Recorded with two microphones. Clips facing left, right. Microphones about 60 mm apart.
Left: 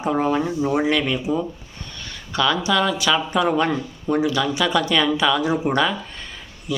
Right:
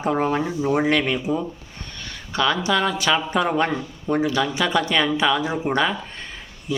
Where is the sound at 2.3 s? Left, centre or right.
Right.